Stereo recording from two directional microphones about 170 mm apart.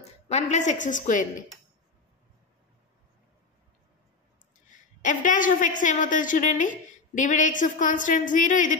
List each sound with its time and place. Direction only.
0.0 s a woman's voice: 40° left (ahead or behind)
5.0 s a woman's voice: 50° left (ahead or behind)